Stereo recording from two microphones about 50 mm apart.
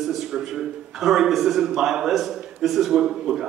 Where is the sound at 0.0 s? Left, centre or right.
Centre.